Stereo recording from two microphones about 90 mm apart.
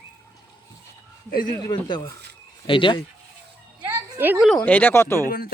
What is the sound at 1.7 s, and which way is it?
Speech, 55° left (ahead or behind).